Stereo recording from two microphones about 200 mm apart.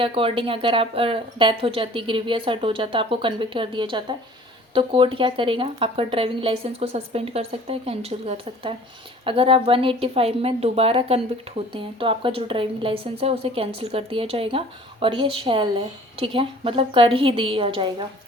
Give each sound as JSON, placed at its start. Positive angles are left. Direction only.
{"t": 0.0, "sound": "a woman's voice", "side_deg": -25}